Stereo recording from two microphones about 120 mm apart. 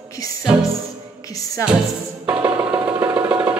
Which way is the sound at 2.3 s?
15° right (ahead or behind).